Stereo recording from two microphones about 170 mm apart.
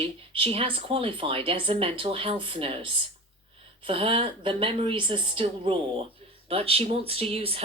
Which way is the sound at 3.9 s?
30° right (ahead or behind).